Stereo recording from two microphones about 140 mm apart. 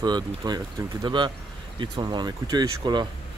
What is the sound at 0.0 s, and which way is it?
Speech, 30° right (ahead or behind).